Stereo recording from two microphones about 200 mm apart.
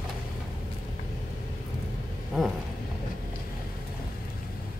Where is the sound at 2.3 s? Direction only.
Centre (ahead or behind).